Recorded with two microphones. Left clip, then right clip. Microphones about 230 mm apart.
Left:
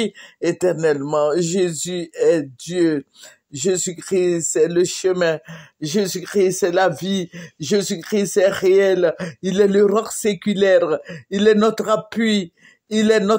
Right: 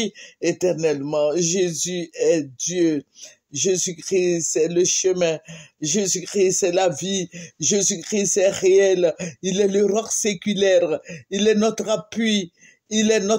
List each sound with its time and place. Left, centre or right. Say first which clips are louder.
0.0 s speech: left 2 dB; left